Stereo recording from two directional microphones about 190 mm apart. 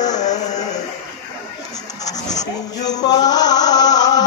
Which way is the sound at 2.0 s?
20° left (ahead or behind).